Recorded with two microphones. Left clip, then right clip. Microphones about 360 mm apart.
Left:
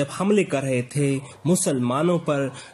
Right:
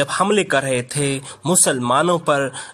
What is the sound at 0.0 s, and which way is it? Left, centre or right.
Speech, right.